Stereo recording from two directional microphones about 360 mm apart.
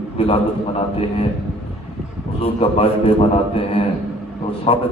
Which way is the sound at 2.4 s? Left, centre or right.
Centre.